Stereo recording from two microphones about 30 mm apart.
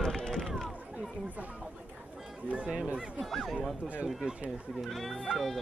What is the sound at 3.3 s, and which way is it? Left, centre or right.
Speech, centre.